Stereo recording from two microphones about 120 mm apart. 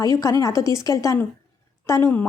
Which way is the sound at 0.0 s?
25° left (ahead or behind).